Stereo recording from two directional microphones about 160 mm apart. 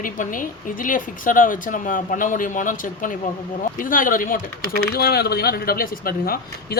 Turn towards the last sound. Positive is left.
turn(degrees=65)  # may be behind; listen again after turning